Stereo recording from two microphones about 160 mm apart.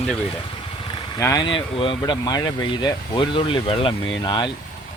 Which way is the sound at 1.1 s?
25° left (ahead or behind).